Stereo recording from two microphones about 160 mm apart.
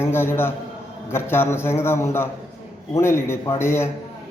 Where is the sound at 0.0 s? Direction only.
15° left (ahead or behind).